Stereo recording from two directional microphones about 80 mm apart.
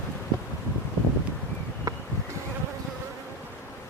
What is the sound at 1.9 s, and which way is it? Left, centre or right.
Bee, right.